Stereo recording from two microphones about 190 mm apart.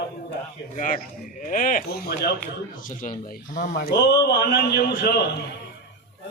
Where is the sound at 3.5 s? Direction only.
50° left (ahead or behind).